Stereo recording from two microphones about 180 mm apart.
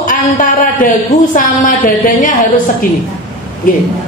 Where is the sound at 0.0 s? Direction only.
50° left (ahead or behind).